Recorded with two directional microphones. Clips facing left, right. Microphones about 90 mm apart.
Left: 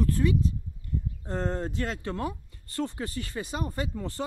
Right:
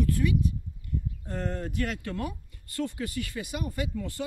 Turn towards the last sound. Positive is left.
turn(degrees=30)  # may be behind; listen again after turning